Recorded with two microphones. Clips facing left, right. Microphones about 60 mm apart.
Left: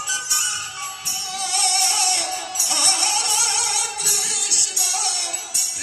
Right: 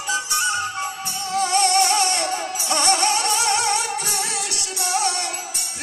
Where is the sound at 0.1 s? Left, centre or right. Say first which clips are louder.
Right 10 dB; right.